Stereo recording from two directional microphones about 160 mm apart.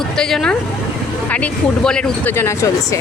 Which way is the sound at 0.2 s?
5° left (ahead or behind).